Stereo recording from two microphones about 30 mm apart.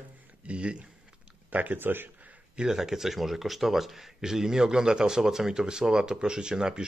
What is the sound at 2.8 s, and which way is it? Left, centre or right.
Speech, centre.